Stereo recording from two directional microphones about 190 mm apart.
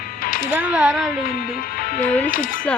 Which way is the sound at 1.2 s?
50° left (ahead or behind).